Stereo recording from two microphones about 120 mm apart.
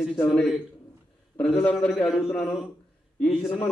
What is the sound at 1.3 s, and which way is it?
Speech, 10° left (ahead or behind).